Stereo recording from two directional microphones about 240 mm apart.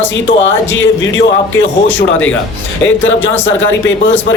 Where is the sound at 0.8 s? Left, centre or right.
Left.